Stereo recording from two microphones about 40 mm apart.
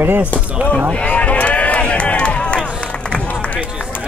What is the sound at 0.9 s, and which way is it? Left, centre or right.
Run, left.